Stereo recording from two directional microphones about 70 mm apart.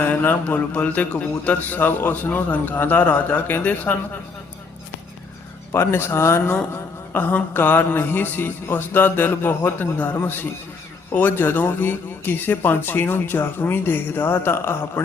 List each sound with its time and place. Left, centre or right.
0.0 s a man's voice: left
5.7 s a man's voice: left